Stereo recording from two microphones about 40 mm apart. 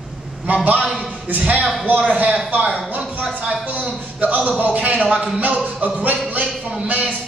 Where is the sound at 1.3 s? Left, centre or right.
Right.